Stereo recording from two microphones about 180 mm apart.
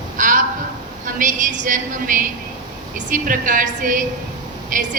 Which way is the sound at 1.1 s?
45° right (ahead or behind).